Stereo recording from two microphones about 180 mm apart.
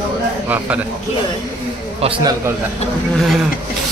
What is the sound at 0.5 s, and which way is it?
Speech, 10° right (ahead or behind).